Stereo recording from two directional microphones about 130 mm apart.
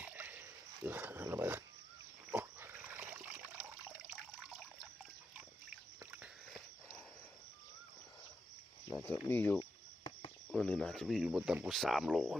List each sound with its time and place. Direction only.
0.0 s dog: 15° right (ahead or behind)
2.3 s trickle: 15° right (ahead or behind)
4.2 s water: 5° right (ahead or behind)
9.0 s speech: 15° left (ahead or behind)
9.6 s cricket: 40° left (ahead or behind)
10.5 s speech: 5° left (ahead or behind)